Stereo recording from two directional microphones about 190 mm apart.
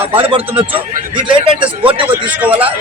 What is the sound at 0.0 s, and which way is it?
A man's voice, 30° right (ahead or behind).